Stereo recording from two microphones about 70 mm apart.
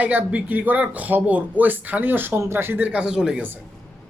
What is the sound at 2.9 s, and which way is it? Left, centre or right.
Speech, centre.